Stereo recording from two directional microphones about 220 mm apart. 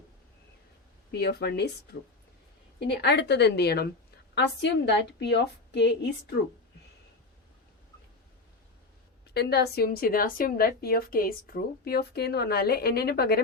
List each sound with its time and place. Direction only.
1.1 s a woman's voice: 50° left (ahead or behind)
9.3 s a woman's voice: 45° left (ahead or behind)